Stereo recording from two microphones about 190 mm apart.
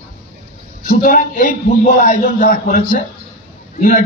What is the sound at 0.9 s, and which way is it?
A man's voice, 45° left (ahead or behind).